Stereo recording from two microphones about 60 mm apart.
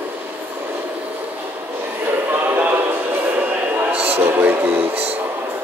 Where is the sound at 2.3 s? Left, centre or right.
Right.